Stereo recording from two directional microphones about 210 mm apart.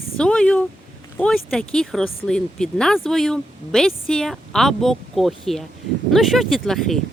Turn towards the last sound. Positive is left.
turn(degrees=0)  # may be behind; listen again after turning